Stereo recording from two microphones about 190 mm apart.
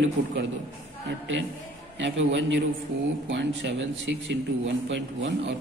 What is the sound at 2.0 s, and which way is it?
A man's voice, 75° right (ahead or behind).